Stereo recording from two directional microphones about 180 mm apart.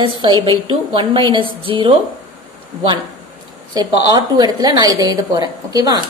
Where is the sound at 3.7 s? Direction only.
20° right (ahead or behind).